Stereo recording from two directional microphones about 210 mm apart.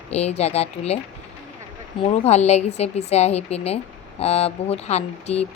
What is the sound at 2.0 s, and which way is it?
A woman's voice, 30° left (ahead or behind).